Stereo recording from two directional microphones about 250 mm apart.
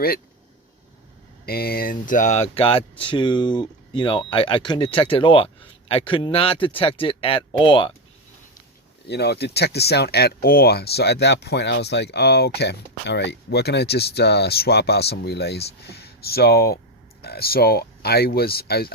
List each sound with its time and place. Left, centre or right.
1.5 s speech: left; by 7.9 s centre
9.0 s speech: left